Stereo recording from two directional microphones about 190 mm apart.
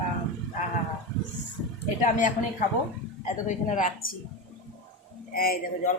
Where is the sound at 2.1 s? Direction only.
45° left (ahead or behind).